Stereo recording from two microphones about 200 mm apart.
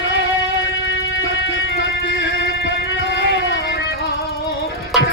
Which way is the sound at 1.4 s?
65° left (ahead or behind).